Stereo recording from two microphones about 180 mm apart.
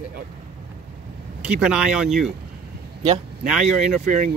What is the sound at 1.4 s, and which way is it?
Speech, 5° right (ahead or behind).